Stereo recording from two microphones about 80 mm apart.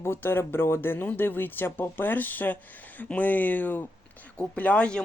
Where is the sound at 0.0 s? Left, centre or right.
Left.